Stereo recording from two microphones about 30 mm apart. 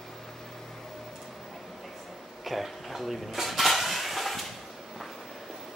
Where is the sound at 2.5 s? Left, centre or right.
Centre.